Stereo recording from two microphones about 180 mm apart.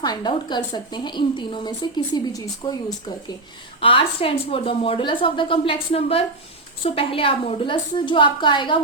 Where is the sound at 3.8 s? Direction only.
30° left (ahead or behind).